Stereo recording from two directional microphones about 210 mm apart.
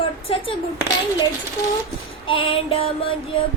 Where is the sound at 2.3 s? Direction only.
25° left (ahead or behind).